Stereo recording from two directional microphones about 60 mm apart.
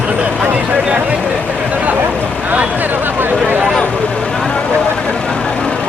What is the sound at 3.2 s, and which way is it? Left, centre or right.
Vehicle, right.